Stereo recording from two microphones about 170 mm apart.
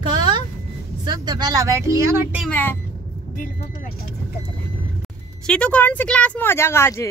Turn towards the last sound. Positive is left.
turn(degrees=15)  # may be behind; listen again after turning